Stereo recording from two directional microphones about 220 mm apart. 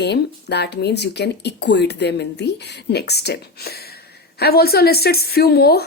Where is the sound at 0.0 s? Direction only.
50° left (ahead or behind).